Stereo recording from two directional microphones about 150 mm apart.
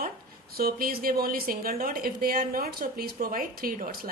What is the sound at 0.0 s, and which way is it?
A woman's voice, 90° right.